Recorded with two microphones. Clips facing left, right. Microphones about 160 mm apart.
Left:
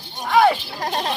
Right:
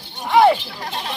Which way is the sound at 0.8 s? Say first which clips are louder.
Left 10 dB; 40° left (ahead or behind).